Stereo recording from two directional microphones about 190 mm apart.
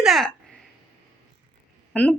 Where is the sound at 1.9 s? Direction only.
10° left (ahead or behind).